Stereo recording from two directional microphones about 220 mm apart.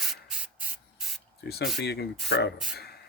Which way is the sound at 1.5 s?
45° left (ahead or behind).